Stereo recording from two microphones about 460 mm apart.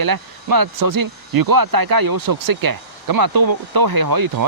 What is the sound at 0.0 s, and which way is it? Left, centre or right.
Speech, right.